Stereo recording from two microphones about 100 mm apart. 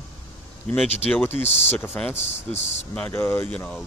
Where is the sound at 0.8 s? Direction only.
90° left.